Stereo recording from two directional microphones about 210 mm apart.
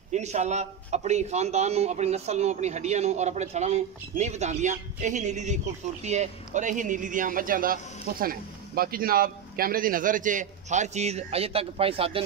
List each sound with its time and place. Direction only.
0.1 s a man's voice: 35° right (ahead or behind)